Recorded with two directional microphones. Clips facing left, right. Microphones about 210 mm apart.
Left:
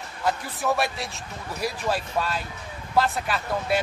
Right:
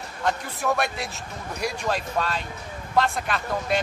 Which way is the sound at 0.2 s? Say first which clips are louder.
Even; 5° left (ahead or behind).